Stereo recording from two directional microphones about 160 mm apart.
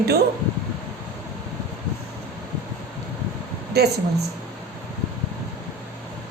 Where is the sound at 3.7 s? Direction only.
90° right.